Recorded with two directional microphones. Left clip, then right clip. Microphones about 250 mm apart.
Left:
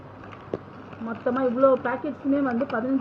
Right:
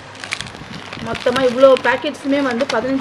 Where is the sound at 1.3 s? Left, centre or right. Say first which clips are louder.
Right 9 dB; right.